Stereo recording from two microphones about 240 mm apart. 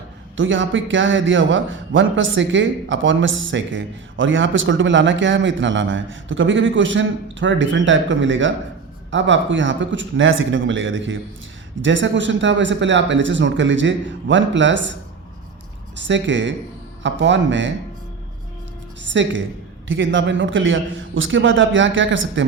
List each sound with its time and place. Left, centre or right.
0.3 s a man's voice: right
16.0 s a man's voice: right
19.0 s a woman's voice: right